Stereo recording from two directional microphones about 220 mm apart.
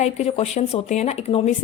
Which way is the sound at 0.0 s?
30° left (ahead or behind).